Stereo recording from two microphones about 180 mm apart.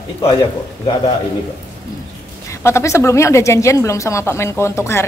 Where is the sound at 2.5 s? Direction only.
15° left (ahead or behind).